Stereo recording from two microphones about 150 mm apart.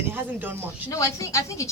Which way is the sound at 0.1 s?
10° right (ahead or behind).